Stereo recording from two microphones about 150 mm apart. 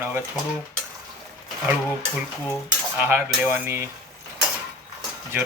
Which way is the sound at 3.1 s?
15° right (ahead or behind).